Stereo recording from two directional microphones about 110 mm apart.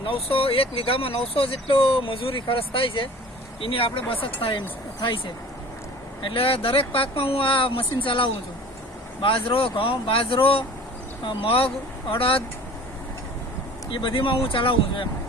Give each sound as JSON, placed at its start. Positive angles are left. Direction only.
{"t": 0.0, "sound": "speech", "side_deg": 55}
{"t": 6.2, "sound": "speech", "side_deg": 55}
{"t": 13.9, "sound": "speech", "side_deg": 50}